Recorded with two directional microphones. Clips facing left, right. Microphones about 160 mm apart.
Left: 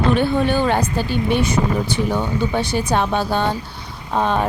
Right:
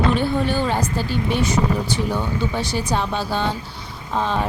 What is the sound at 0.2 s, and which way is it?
Speech, 60° left (ahead or behind).